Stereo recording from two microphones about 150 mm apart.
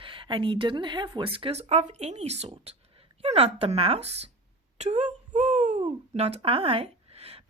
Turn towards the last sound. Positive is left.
turn(degrees=-40)  # may be behind; listen again after turning